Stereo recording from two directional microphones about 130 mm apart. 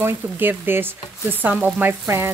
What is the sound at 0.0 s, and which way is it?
Speech, 15° right (ahead or behind).